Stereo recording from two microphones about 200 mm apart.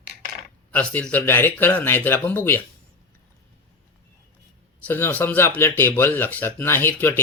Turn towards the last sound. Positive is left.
turn(degrees=10)  # may be behind; listen again after turning